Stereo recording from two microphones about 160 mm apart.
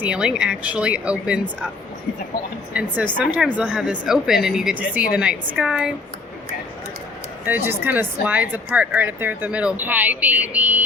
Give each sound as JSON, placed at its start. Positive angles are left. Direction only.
{"t": 0.0, "sound": "speech", "side_deg": -5}
{"t": 2.7, "sound": "speech", "side_deg": -10}
{"t": 7.4, "sound": "speech", "side_deg": -15}